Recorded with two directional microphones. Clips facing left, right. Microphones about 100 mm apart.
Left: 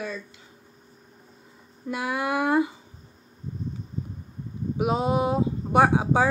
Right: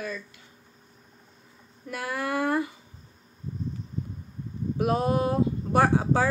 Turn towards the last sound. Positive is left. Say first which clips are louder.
# left 2 dB
turn(degrees=15)  # may be behind; listen again after turning